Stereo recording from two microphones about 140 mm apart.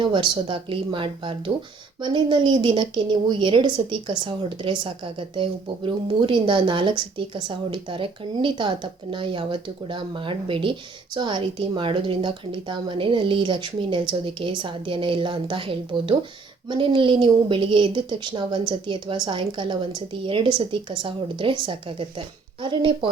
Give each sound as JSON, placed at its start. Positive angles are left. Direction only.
{"t": 0.0, "sound": "a woman's voice", "side_deg": -35}